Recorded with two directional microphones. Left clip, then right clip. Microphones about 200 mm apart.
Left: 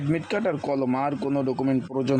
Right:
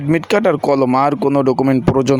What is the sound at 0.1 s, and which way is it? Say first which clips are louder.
A man's voice: right 12 dB; 25° right (ahead or behind).